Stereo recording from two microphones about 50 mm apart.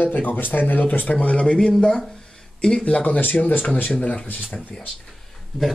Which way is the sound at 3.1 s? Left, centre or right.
Left.